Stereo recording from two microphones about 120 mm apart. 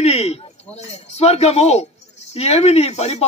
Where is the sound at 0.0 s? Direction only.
60° left (ahead or behind).